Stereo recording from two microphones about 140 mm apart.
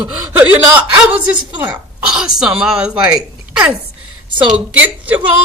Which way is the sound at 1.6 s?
5° right (ahead or behind).